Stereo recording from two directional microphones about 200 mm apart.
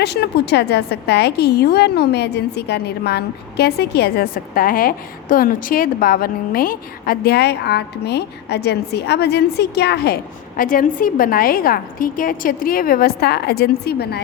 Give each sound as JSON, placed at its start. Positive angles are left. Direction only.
{"t": 0.0, "sound": "a woman's voice", "side_deg": 55}
{"t": 10.6, "sound": "a woman's voice", "side_deg": 45}